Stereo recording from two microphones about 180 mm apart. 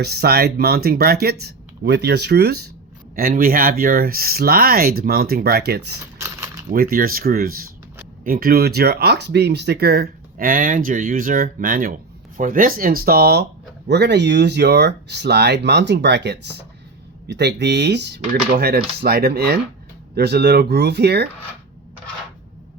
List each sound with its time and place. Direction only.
0.0 s speech: 60° right (ahead or behind)
3.2 s speech: 55° right (ahead or behind)
6.1 s pulleys: 15° right (ahead or behind)
6.7 s speech: 55° right (ahead or behind)